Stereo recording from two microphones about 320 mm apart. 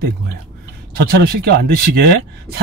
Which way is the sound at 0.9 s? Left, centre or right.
Right.